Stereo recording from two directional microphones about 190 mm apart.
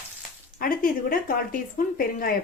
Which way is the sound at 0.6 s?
45° left (ahead or behind).